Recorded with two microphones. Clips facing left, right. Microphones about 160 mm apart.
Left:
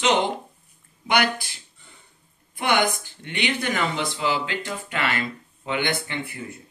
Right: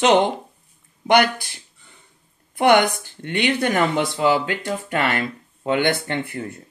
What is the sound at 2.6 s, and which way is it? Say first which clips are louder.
Speech: right 7 dB; 60° right (ahead or behind).